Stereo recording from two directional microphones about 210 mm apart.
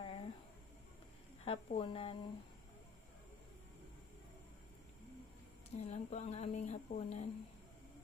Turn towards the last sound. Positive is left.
turn(degrees=30)  # may be behind; listen again after turning